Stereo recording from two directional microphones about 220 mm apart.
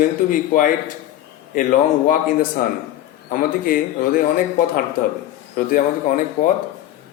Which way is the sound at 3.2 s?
40° left (ahead or behind).